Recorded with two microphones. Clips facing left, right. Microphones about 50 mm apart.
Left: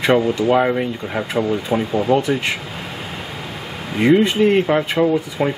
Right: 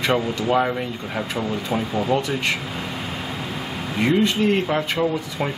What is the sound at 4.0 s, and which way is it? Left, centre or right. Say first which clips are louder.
Speech: left 5 dB; centre.